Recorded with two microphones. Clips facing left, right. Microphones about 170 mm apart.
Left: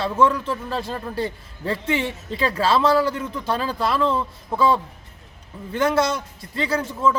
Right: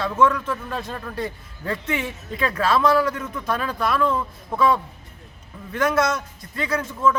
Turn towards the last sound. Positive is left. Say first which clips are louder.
# even
turn(degrees=30)  # may be behind; listen again after turning